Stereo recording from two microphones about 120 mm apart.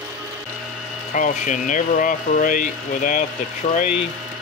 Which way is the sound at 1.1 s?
90° left.